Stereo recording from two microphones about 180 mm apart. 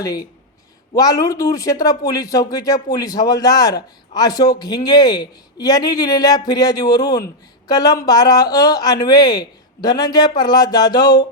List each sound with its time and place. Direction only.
0.9 s speech: 20° left (ahead or behind)